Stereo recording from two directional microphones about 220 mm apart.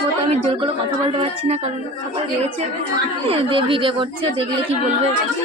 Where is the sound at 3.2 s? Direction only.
25° right (ahead or behind).